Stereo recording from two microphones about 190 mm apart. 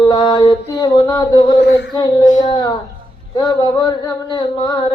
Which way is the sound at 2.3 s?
40° left (ahead or behind).